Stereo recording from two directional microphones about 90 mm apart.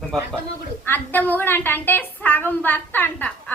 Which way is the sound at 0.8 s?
20° left (ahead or behind).